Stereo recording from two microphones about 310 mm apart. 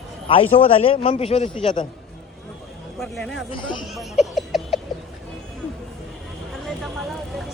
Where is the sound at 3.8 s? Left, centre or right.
Centre.